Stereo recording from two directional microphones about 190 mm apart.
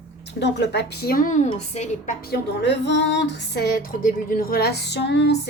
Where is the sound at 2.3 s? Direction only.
65° left (ahead or behind).